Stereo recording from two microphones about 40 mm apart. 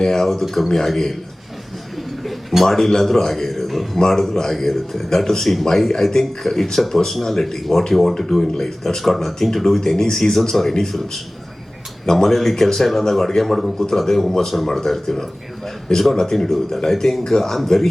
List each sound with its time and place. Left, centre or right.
0.0 s a man's voice: centre
2.0 s a sound: centre
2.6 s a man's voice: centre
3.9 s a man's voice: centre